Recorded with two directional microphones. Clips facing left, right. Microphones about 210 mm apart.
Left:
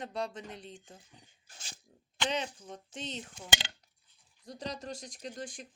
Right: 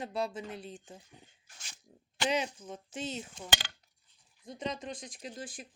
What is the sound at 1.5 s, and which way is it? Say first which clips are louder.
Speech: left 3 dB; 30° left (ahead or behind).